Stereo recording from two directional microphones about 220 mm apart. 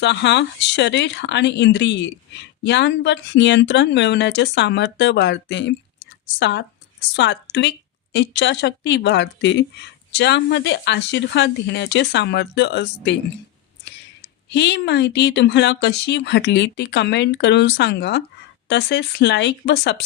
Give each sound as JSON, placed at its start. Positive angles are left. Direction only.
{"t": 0.0, "sound": "speech", "side_deg": 55}